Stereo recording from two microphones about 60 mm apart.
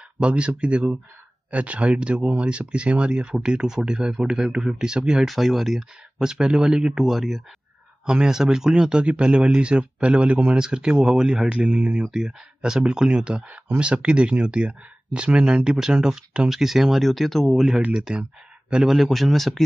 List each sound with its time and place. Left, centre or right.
0.2 s speech: centre
5.2 s speech: centre
8.0 s speech: centre